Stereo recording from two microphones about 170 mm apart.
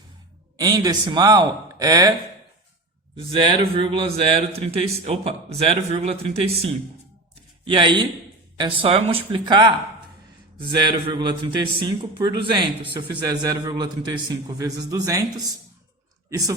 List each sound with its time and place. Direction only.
0.5 s a man's voice: 20° right (ahead or behind)
3.2 s a man's voice: 30° right (ahead or behind)